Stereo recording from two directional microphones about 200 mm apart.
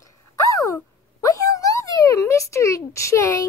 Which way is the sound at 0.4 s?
15° left (ahead or behind).